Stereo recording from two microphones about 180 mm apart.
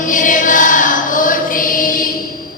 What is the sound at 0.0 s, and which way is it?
Chant, 45° left (ahead or behind).